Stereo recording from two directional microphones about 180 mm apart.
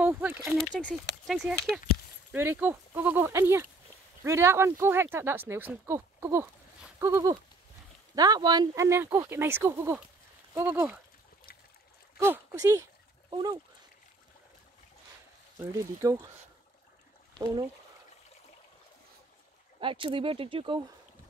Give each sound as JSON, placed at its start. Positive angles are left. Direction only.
{"t": 0.0, "sound": "speech", "side_deg": -10}
{"t": 0.7, "sound": "speech", "side_deg": 0}
{"t": 2.3, "sound": "speech", "side_deg": -10}
{"t": 12.2, "sound": "speech", "side_deg": -15}
{"t": 15.7, "sound": "speech", "side_deg": -20}
{"t": 19.8, "sound": "speech", "side_deg": -30}